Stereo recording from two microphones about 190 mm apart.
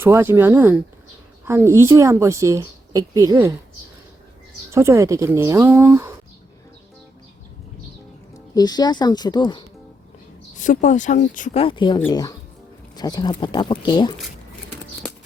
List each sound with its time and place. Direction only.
0.0 s a woman's voice: 10° right (ahead or behind)
4.7 s a woman's voice: 15° right (ahead or behind)
8.5 s speech: 20° left (ahead or behind)
10.6 s speech: 40° left (ahead or behind)
11.6 s speech: 25° left (ahead or behind)